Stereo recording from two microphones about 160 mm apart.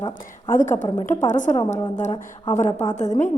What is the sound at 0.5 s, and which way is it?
A woman's voice, 50° left (ahead or behind).